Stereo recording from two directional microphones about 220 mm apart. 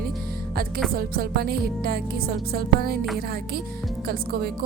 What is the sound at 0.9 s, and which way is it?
Music, 45° right (ahead or behind).